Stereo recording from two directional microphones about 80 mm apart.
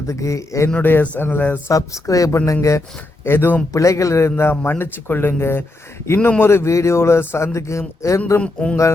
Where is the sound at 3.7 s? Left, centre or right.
Left.